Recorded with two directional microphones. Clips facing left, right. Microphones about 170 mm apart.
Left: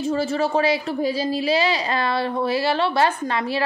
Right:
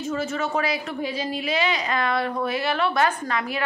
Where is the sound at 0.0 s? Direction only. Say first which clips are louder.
Left 5 dB; 30° left (ahead or behind).